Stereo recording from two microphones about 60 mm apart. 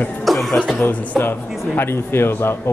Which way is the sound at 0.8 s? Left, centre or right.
Left.